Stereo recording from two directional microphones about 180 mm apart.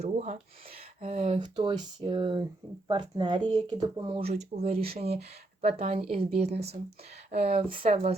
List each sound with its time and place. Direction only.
0.0 s speech: 40° right (ahead or behind)
1.4 s speech: 25° right (ahead or behind)